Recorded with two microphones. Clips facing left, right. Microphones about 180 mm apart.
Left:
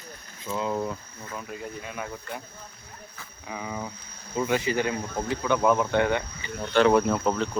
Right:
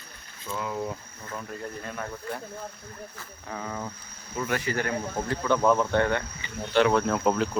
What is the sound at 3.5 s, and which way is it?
Speech, 10° left (ahead or behind).